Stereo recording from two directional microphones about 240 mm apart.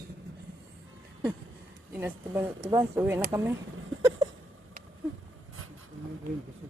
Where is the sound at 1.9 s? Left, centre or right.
Centre.